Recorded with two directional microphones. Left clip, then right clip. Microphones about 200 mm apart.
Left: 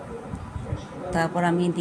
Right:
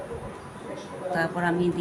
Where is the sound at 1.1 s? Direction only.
30° left (ahead or behind).